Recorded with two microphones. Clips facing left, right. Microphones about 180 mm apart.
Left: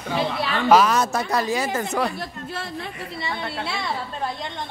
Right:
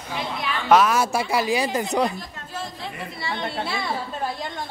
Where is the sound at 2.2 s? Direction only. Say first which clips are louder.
Left 2 dB; 70° left (ahead or behind).